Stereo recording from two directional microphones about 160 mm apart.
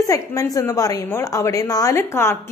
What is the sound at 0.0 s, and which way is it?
A woman's voice, 20° left (ahead or behind).